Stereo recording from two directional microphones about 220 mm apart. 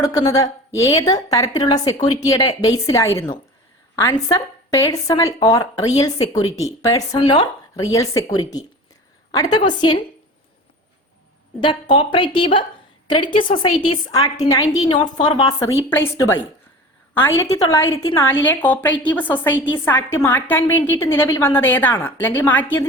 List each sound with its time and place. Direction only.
0.0 s a woman's voice: 15° left (ahead or behind)
9.3 s a woman's voice: 20° left (ahead or behind)
11.6 s a woman's voice: 20° left (ahead or behind)